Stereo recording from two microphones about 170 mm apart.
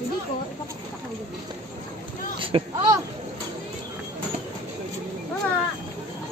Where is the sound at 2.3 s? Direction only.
30° right (ahead or behind).